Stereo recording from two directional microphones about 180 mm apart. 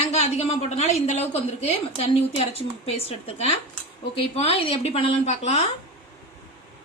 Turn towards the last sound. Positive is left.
turn(degrees=35)  # may be behind; listen again after turning